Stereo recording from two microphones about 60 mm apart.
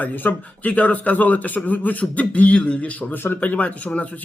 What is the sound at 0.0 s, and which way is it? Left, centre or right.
A man's voice, left.